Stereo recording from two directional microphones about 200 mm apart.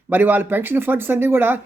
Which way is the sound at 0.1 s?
10° right (ahead or behind).